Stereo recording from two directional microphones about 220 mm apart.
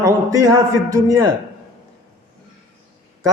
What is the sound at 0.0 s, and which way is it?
A man's voice, 15° right (ahead or behind).